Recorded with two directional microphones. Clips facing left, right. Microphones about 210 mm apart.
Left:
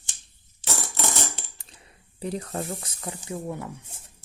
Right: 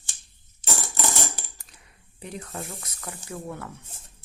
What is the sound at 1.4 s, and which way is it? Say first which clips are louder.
Coin: even; 30° left (ahead or behind).